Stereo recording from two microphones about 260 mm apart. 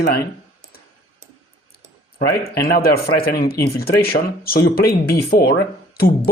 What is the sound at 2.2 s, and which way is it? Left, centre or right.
Speech, left.